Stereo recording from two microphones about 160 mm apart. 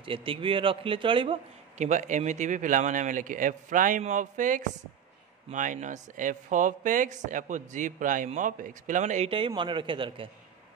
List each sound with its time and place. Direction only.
0.0 s a man's voice: 35° right (ahead or behind)
1.9 s speech: 50° right (ahead or behind)
9.6 s a man's voice: 30° right (ahead or behind)